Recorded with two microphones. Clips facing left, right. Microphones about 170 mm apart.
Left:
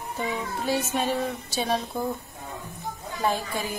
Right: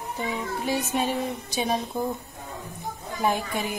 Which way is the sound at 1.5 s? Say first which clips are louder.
Right 1 dB; 15° right (ahead or behind).